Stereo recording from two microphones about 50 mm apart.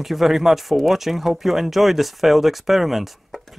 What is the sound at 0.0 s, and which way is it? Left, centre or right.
Speech, centre.